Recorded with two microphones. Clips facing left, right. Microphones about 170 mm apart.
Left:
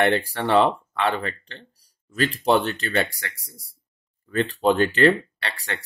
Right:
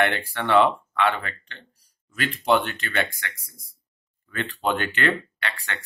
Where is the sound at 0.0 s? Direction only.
35° left (ahead or behind).